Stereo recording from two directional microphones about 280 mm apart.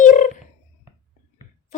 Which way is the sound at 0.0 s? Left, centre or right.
Left.